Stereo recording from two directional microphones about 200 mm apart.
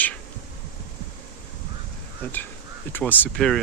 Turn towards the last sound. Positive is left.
turn(degrees=5)  # may be behind; listen again after turning